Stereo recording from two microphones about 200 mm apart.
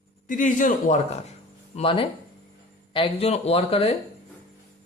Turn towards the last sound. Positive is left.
turn(degrees=30)  # may be behind; listen again after turning